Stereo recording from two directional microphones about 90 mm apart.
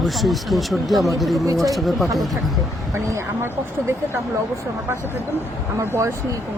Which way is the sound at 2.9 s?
30° right (ahead or behind).